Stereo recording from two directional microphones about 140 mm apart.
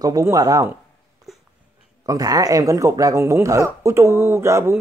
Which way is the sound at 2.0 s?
25° right (ahead or behind).